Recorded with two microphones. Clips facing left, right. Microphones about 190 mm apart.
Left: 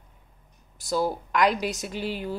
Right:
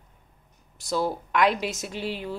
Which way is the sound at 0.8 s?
Centre (ahead or behind).